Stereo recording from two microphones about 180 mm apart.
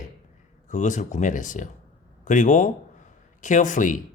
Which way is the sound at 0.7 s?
40° left (ahead or behind).